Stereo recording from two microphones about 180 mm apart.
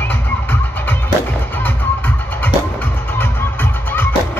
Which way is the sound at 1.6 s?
10° left (ahead or behind).